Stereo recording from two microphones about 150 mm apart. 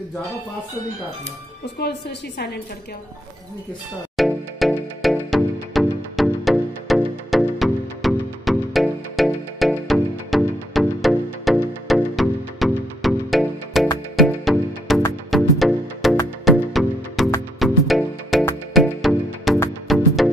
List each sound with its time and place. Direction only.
1.8 s a woman's voice: 90° left
4.2 s music: centre (ahead or behind)